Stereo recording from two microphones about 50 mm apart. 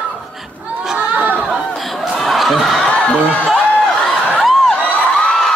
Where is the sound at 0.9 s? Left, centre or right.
Right.